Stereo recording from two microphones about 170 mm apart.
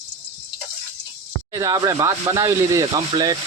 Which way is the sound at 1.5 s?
20° right (ahead or behind).